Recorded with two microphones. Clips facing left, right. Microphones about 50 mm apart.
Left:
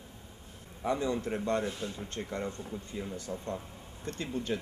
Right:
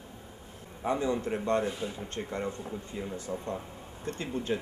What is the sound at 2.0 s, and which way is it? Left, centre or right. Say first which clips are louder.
Speech: right 1 dB; right.